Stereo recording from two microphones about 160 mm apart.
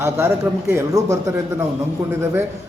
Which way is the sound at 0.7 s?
15° right (ahead or behind).